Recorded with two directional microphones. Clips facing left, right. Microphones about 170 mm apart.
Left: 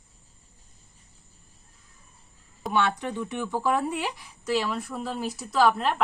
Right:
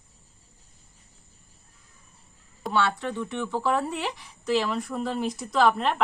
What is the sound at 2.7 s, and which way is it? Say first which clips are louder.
Speech: even; 15° left (ahead or behind).